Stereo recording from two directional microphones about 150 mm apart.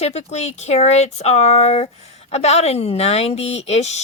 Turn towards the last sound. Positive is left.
turn(degrees=45)  # may be behind; listen again after turning